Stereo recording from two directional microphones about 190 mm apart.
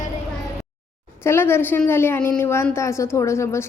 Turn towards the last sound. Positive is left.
turn(degrees=15)  # may be behind; listen again after turning